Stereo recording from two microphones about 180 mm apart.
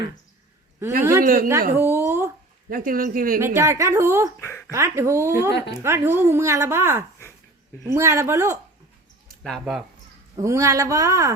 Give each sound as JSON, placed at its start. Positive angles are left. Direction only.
{"t": 1.2, "sound": "speech", "side_deg": -50}
{"t": 1.7, "sound": "a woman's voice", "side_deg": -15}
{"t": 2.6, "sound": "speech", "side_deg": -50}
{"t": 3.4, "sound": "a woman's voice", "side_deg": -15}
{"t": 4.4, "sound": "speech", "side_deg": 10}
{"t": 4.7, "sound": "a woman's voice", "side_deg": -15}
{"t": 9.4, "sound": "speech", "side_deg": 0}
{"t": 10.3, "sound": "a woman's voice", "side_deg": -15}